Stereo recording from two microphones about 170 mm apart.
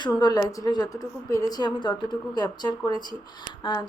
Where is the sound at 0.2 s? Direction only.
20° left (ahead or behind).